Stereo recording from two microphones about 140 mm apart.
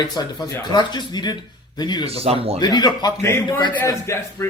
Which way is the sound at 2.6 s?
30° left (ahead or behind).